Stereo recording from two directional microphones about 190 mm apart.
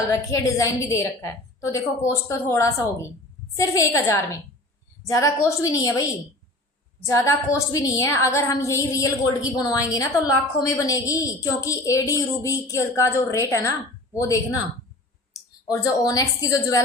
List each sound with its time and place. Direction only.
0.1 s a woman's voice: 15° left (ahead or behind)
15.3 s clicking: 15° left (ahead or behind)
15.8 s a woman's voice: 20° left (ahead or behind)